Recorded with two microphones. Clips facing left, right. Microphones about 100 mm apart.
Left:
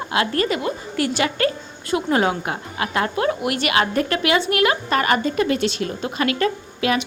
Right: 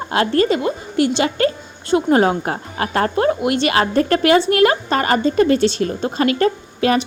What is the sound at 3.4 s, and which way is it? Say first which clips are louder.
A woman's voice: right 4 dB; 30° right (ahead or behind).